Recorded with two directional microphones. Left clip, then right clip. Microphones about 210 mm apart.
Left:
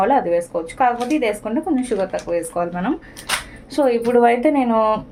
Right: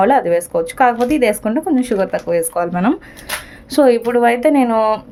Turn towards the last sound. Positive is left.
turn(degrees=-50)  # may be behind; listen again after turning